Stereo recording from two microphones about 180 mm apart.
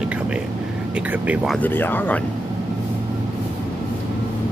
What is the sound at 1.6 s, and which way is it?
Speech, 10° left (ahead or behind).